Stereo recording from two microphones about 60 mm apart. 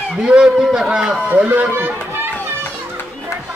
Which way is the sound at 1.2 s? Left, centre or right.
Right.